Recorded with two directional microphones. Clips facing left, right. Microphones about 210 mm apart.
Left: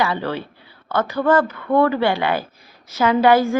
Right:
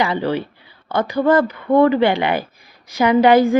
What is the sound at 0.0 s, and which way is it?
Speech, 15° right (ahead or behind).